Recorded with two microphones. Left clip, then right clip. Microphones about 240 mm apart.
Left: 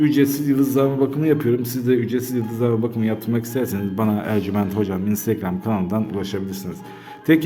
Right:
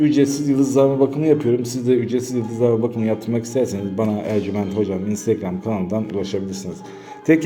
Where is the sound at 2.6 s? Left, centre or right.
Left.